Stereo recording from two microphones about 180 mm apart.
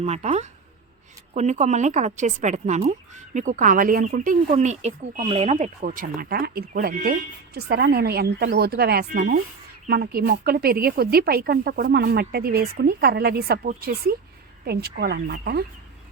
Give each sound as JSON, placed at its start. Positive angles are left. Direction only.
{"t": 0.0, "sound": "a woman's voice", "side_deg": -40}